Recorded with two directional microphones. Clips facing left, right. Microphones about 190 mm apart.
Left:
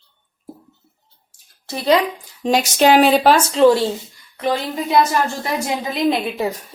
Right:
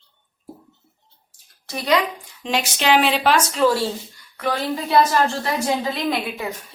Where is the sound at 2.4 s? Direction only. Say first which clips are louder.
Left 8 dB; 40° left (ahead or behind); by 6.1 s 20° left (ahead or behind).